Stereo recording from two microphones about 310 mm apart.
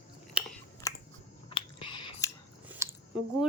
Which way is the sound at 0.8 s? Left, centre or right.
Centre.